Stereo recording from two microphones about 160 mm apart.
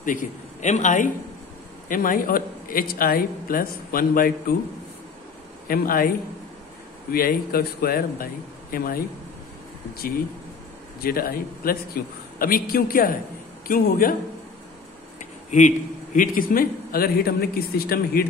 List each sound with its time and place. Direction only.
0.0 s a man's voice: 55° left (ahead or behind)
5.7 s a man's voice: 65° left (ahead or behind)
15.1 s a sound: 50° left (ahead or behind)
16.2 s a man's voice: 65° left (ahead or behind)